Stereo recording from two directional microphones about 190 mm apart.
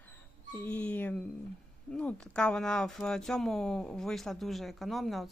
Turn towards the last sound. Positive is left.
turn(degrees=0)  # may be behind; listen again after turning